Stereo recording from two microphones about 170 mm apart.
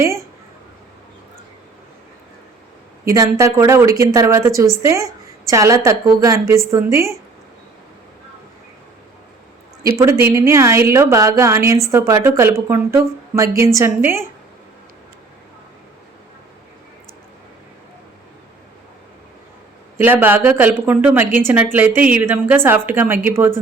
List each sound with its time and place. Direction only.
3.0 s a woman's voice: 15° right (ahead or behind)
10.0 s a woman's voice: 15° right (ahead or behind)
20.0 s a woman's voice: 10° right (ahead or behind)